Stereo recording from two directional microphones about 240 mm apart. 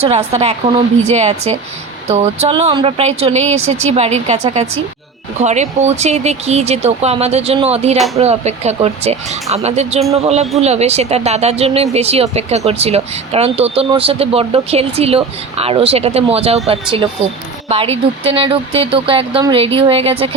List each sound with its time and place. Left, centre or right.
0.0 s speech: right
17.7 s speech: right